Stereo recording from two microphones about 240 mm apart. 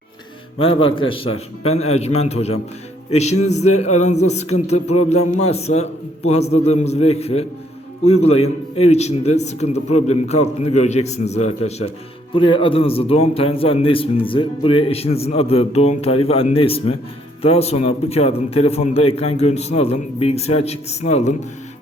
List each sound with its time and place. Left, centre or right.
0.6 s a man's voice: left